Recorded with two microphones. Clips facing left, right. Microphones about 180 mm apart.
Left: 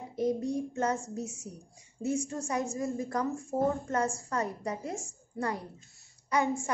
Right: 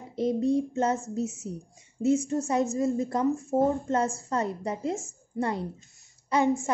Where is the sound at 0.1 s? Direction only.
25° right (ahead or behind).